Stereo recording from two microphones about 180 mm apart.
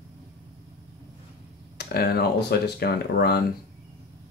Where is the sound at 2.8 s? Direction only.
60° left (ahead or behind).